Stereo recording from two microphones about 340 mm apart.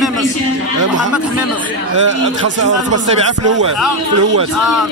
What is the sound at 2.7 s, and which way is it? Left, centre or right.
Speech, right.